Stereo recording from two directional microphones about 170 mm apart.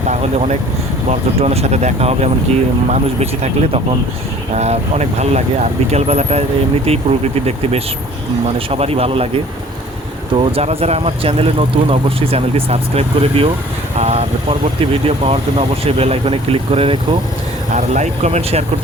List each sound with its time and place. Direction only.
0.1 s speech: 40° right (ahead or behind)
17.7 s speech: 45° right (ahead or behind)